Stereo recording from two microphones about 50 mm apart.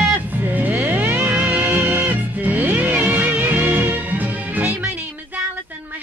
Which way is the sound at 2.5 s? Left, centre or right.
Right.